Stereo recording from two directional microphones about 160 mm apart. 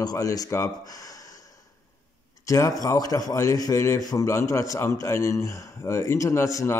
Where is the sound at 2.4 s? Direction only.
20° left (ahead or behind).